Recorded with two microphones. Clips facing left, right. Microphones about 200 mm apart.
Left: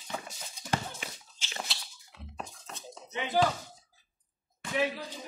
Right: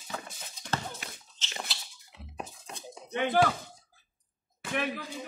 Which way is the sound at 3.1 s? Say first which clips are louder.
Right 6 dB; 55° right (ahead or behind).